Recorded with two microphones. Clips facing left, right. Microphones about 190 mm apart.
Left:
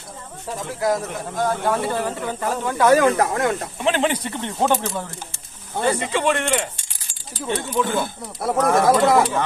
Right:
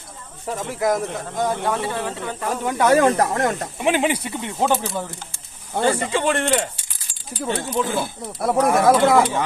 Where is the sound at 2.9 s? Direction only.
35° right (ahead or behind).